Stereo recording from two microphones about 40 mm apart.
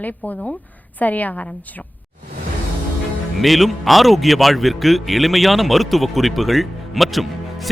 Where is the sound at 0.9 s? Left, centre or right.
Left.